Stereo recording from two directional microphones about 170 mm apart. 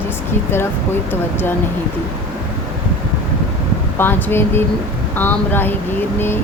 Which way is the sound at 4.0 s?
10° left (ahead or behind).